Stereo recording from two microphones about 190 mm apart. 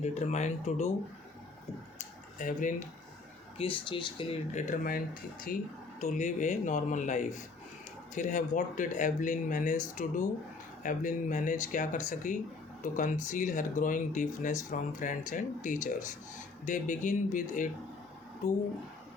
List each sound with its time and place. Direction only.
0.0 s speech: 35° left (ahead or behind)
2.0 s tick-tock: 45° left (ahead or behind)
3.6 s speech: 25° left (ahead or behind); by 17.7 s 45° left (ahead or behind)